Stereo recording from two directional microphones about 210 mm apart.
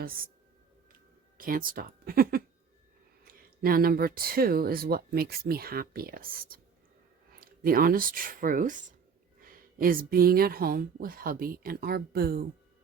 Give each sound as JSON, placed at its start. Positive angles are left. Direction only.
{"t": 0.0, "sound": "speech", "side_deg": -45}